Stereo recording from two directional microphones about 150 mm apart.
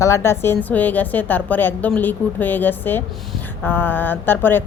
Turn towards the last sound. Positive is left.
turn(degrees=15)  # may be behind; listen again after turning